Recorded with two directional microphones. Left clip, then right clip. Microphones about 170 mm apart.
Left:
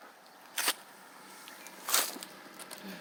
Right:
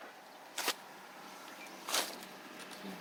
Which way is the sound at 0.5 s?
65° left (ahead or behind).